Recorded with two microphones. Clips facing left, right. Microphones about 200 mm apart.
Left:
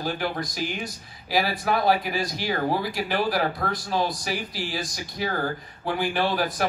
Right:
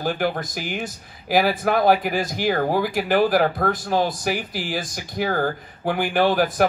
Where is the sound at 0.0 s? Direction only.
50° right (ahead or behind).